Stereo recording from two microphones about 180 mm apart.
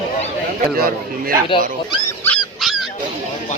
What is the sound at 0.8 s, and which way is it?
Speech, 55° right (ahead or behind).